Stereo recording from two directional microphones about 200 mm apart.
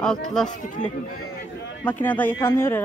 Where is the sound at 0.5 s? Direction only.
40° left (ahead or behind).